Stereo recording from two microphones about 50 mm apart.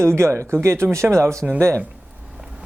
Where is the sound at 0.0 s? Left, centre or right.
Right.